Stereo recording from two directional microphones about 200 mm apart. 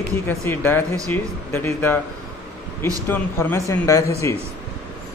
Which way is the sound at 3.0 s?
10° left (ahead or behind).